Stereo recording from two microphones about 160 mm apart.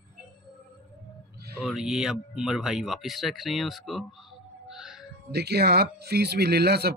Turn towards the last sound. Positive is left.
turn(degrees=-85)